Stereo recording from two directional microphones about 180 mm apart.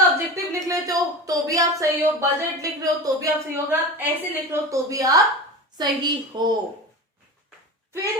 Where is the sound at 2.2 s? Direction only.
20° right (ahead or behind).